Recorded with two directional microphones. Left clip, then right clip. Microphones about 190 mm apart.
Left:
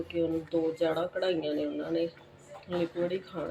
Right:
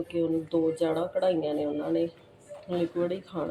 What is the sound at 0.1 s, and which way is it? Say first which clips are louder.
Speech: right 2 dB; 15° right (ahead or behind).